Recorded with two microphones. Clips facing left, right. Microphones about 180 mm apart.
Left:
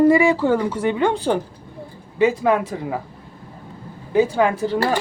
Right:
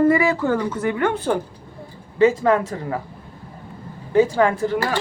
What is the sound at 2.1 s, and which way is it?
Speech, 10° left (ahead or behind).